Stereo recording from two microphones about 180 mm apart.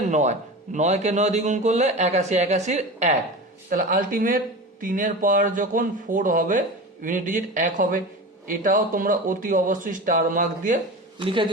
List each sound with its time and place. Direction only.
0.0 s a man's voice: 40° right (ahead or behind)
3.7 s speech: 50° right (ahead or behind)
11.2 s a man's voice: 30° right (ahead or behind)